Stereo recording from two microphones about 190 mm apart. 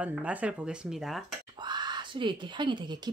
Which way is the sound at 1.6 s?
20° right (ahead or behind).